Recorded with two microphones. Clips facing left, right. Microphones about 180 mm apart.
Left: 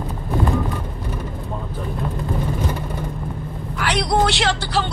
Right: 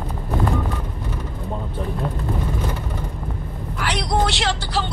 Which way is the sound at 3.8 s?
70° left (ahead or behind).